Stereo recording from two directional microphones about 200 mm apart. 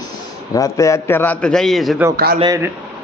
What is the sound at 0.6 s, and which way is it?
A man's voice, 15° left (ahead or behind).